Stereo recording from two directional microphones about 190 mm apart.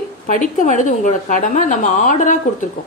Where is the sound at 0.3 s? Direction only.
45° left (ahead or behind).